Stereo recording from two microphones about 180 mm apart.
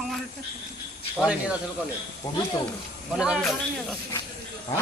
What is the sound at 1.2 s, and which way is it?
Speech, 5° right (ahead or behind).